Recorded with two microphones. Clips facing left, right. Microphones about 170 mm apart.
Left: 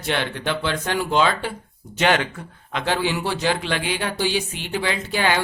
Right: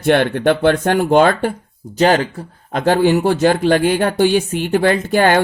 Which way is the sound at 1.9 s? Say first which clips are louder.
Right 6 dB; 35° right (ahead or behind).